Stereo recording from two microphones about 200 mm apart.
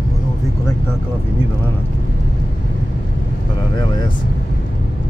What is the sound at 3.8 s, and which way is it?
Speech, 20° left (ahead or behind).